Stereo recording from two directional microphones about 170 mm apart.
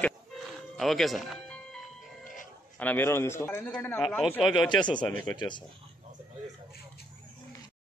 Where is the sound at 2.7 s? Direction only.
10° left (ahead or behind).